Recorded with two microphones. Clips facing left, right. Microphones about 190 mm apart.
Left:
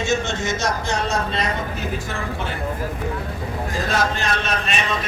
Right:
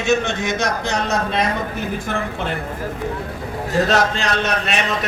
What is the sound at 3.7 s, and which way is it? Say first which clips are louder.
A man's voice: right 6 dB; 70° right (ahead or behind).